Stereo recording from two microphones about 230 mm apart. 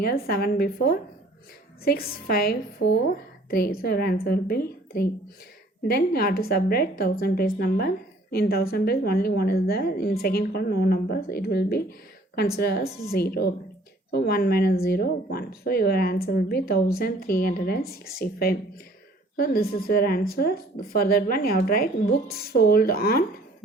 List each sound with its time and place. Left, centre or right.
0.0 s a woman's voice: left